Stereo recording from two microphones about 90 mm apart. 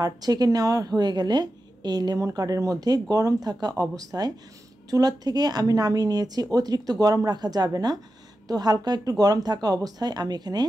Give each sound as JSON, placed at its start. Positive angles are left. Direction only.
{"t": 0.0, "sound": "speech", "side_deg": -45}